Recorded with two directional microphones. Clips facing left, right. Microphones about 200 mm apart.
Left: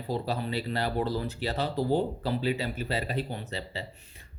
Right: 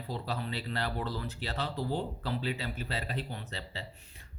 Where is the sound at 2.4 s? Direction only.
5° left (ahead or behind).